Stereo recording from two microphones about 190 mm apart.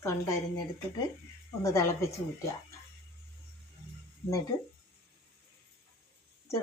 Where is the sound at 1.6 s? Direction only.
15° left (ahead or behind).